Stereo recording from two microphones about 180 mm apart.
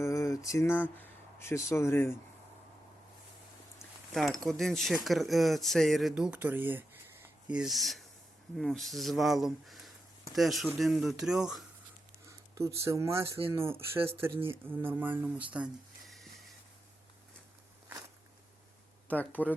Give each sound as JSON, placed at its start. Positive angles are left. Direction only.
{"t": 0.0, "sound": "a sound", "side_deg": 15}
{"t": 1.4, "sound": "speech", "side_deg": 15}
{"t": 4.1, "sound": "speech", "side_deg": 0}
{"t": 12.5, "sound": "speech", "side_deg": -15}
{"t": 19.0, "sound": "speech", "side_deg": 10}